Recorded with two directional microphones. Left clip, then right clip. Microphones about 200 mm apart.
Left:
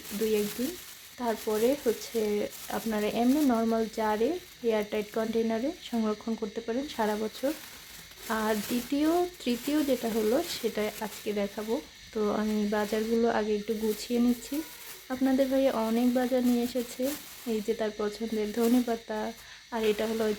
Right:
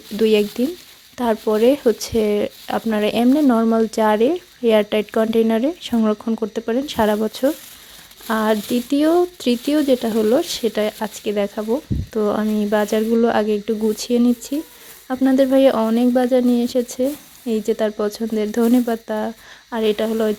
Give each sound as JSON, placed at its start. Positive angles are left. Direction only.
{"t": 1.2, "sound": "speech", "side_deg": -40}